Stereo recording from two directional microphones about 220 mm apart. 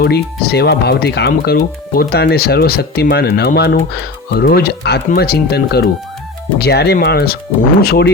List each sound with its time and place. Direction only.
0.0 s speech: 45° left (ahead or behind)